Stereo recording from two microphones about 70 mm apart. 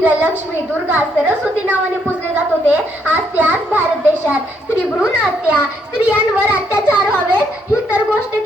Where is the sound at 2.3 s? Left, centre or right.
Right.